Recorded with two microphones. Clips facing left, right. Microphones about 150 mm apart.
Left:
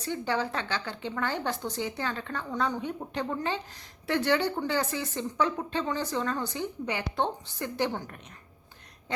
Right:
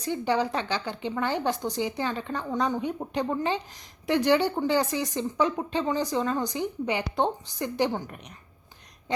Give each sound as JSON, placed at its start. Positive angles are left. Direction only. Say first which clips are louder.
{"t": 0.0, "sound": "a woman's voice", "louder": "right 4 dB", "side_deg": -15}